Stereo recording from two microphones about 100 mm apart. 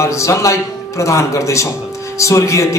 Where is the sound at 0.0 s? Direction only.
30° left (ahead or behind).